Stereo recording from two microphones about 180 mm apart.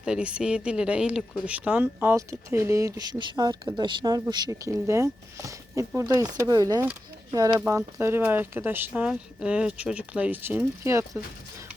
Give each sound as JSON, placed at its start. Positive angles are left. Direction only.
{"t": 0.0, "sound": "speech", "side_deg": -5}